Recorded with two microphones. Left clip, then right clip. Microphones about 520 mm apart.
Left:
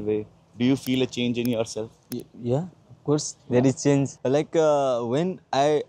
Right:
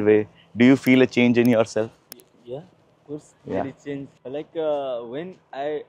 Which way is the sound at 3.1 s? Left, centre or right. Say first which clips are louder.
Left 7 dB; left.